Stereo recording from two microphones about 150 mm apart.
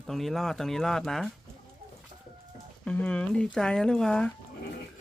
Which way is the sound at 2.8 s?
10° left (ahead or behind).